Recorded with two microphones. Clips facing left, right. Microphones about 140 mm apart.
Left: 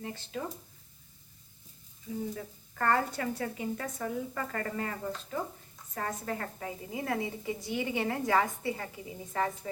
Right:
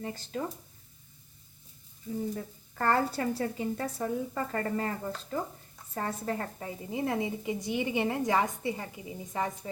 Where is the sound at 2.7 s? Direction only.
30° right (ahead or behind).